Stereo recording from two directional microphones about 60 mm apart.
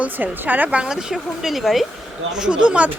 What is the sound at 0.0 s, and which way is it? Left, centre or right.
Speech, right.